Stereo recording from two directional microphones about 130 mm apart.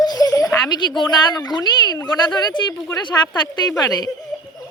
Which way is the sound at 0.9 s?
35° left (ahead or behind).